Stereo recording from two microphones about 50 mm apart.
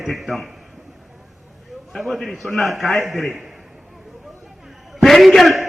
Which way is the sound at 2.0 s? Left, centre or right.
Centre.